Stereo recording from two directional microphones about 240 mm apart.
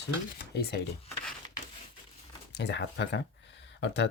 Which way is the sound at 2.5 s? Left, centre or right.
Left.